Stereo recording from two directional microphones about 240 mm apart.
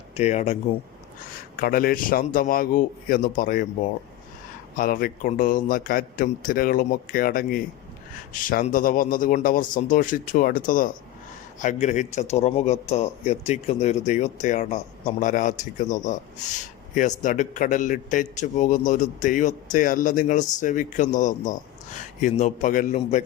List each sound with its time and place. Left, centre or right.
0.2 s a man's voice: left
4.8 s a man's voice: left